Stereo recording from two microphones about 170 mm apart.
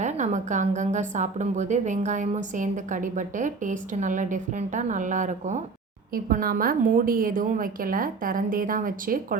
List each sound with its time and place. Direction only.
0.0 s a woman's voice: 45° right (ahead or behind)
6.1 s a woman's voice: 60° right (ahead or behind)